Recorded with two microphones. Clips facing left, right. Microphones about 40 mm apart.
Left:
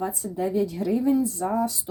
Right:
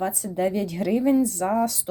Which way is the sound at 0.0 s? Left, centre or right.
Right.